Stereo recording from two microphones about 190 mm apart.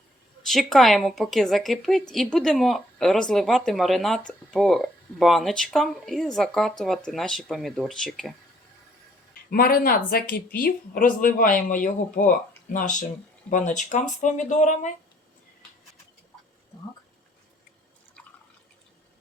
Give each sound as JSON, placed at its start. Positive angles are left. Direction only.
{"t": 0.4, "sound": "a woman's voice", "side_deg": 0}
{"t": 9.5, "sound": "speech", "side_deg": 50}